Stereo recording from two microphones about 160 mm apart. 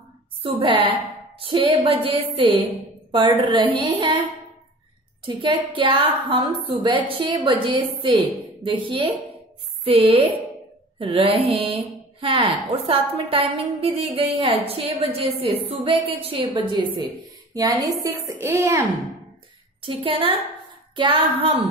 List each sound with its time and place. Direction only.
0.4 s a woman's voice: 35° right (ahead or behind)
5.2 s a woman's voice: 30° right (ahead or behind)
19.8 s a woman's voice: 35° right (ahead or behind)